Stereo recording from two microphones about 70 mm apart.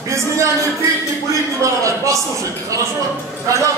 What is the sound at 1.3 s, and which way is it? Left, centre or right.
A man's voice, right.